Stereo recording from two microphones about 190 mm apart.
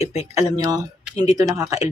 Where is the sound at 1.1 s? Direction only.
35° left (ahead or behind).